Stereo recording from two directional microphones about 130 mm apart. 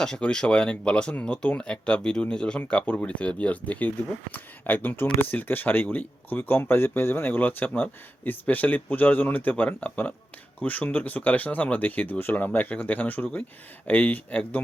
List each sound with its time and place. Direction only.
0.0 s speech: 5° left (ahead or behind)